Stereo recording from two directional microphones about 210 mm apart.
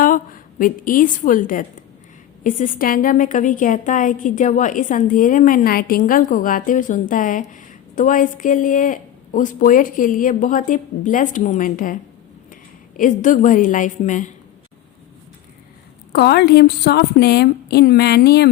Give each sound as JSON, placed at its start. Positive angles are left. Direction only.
{"t": 0.0, "sound": "a woman's voice", "side_deg": 40}
{"t": 13.0, "sound": "a woman's voice", "side_deg": 40}
{"t": 16.1, "sound": "a woman's voice", "side_deg": 50}